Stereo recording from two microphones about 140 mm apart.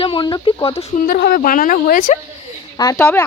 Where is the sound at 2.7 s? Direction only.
25° left (ahead or behind).